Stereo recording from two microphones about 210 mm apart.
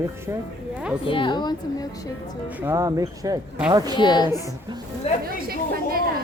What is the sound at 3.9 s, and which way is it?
Speech, 20° left (ahead or behind).